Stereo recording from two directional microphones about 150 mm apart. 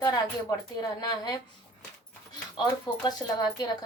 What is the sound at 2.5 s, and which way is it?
Speech, 30° left (ahead or behind).